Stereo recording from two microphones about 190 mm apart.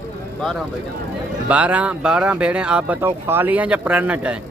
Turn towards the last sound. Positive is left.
turn(degrees=-5)  # may be behind; listen again after turning